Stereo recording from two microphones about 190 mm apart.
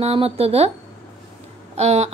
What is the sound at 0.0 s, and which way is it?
Speech, 30° right (ahead or behind).